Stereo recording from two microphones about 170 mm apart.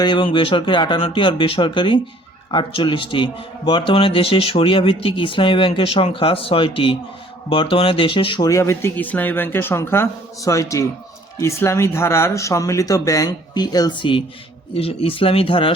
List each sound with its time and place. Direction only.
0.0 s speech: 30° left (ahead or behind)